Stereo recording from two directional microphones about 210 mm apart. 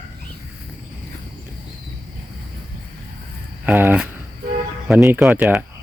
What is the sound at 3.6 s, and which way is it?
Cricket, 10° right (ahead or behind).